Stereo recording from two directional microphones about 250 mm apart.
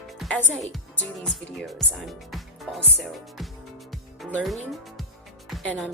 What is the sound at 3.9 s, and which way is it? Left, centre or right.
Music, centre.